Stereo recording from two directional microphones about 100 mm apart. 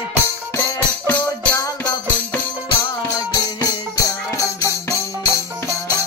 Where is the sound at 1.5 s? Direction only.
40° left (ahead or behind).